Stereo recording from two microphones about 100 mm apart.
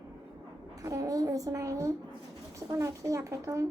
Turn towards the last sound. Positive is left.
turn(degrees=-35)  # may be behind; listen again after turning